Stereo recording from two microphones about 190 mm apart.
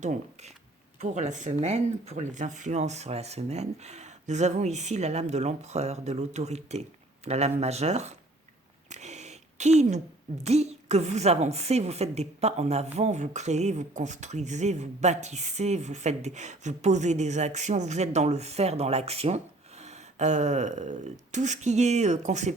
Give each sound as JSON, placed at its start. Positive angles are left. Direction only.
{"t": 0.0, "sound": "a woman's voice", "side_deg": -40}
{"t": 8.9, "sound": "a sound", "side_deg": -35}
{"t": 10.4, "sound": "a woman's voice", "side_deg": -35}